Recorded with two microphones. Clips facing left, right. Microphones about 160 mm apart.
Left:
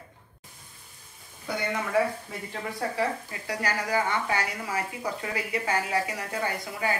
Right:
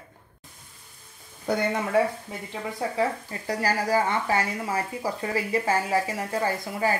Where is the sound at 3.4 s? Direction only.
35° right (ahead or behind).